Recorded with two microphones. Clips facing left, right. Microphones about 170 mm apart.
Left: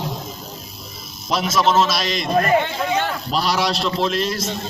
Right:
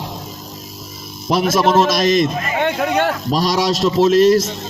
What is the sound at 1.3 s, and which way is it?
Speech, 50° right (ahead or behind).